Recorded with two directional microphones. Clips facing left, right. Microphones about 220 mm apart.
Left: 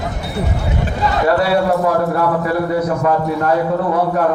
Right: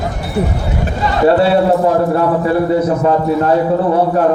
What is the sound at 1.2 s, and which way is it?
A man's voice, 25° right (ahead or behind).